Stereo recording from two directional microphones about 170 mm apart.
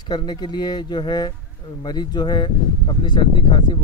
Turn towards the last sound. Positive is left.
turn(degrees=25)  # may be behind; listen again after turning